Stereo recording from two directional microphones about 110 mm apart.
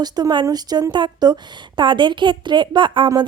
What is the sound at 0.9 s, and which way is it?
Music, 40° right (ahead or behind).